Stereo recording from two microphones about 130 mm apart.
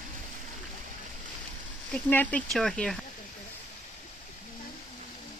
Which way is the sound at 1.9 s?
10° left (ahead or behind).